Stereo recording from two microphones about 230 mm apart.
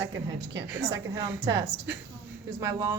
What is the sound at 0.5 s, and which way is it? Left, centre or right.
Speech, centre.